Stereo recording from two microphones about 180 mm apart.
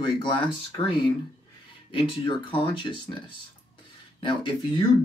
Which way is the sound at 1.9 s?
30° left (ahead or behind).